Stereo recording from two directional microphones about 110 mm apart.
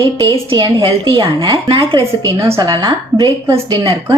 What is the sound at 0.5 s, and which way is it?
A woman's voice, 50° right (ahead or behind).